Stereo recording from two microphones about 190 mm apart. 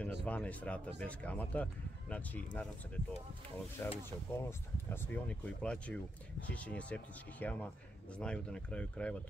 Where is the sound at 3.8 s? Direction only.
10° left (ahead or behind).